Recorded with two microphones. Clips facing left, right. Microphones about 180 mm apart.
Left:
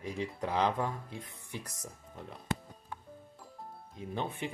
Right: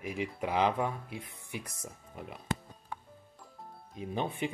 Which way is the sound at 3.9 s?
20° right (ahead or behind).